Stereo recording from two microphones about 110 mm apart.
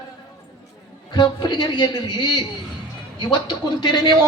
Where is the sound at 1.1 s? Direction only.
40° left (ahead or behind).